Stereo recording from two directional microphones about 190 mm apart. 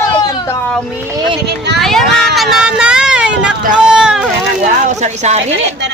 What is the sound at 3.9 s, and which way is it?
Boat, 5° right (ahead or behind).